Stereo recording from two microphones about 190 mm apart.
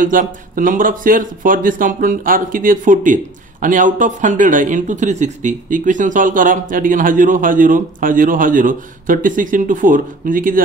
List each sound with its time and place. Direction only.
0.0 s a man's voice: 45° right (ahead or behind)